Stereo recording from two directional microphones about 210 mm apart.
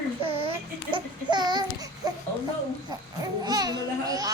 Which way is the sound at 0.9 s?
20° right (ahead or behind).